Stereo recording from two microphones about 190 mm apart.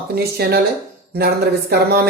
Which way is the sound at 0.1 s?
55° right (ahead or behind).